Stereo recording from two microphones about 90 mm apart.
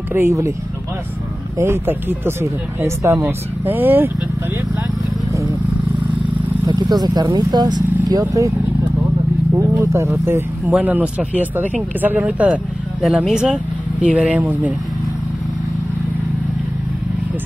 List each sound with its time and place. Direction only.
0.1 s speech: 30° right (ahead or behind)
1.6 s speech: 25° right (ahead or behind)
3.6 s speech: 20° right (ahead or behind)
6.6 s speech: 50° right (ahead or behind)
9.6 s speech: 35° right (ahead or behind)
10.7 s speech: 15° right (ahead or behind)